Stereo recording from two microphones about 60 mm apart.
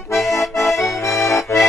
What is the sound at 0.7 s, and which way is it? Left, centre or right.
Accordion, left.